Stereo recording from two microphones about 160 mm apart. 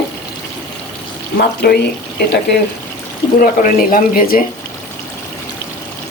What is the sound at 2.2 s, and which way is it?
Speech, 90° left.